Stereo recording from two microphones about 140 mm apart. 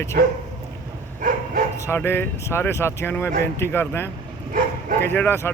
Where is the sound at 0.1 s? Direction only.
90° right.